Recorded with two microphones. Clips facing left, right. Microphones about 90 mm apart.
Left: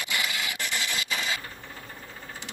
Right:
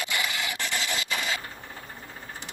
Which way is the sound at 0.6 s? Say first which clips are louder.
Right 1 dB; 25° right (ahead or behind).